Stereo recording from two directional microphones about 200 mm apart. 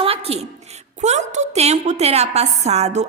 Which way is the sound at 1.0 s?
35° right (ahead or behind).